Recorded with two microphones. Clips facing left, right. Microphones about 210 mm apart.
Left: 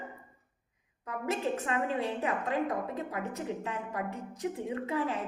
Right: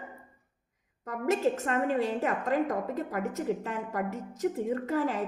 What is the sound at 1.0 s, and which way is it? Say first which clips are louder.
A woman's voice: right 6 dB; 45° right (ahead or behind).